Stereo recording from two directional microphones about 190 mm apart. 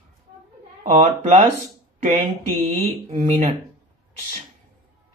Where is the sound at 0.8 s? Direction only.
35° right (ahead or behind).